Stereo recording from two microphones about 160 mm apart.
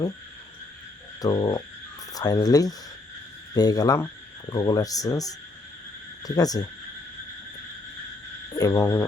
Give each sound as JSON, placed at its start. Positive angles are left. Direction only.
{"t": 1.2, "sound": "speech", "side_deg": 25}
{"t": 8.5, "sound": "speech", "side_deg": 20}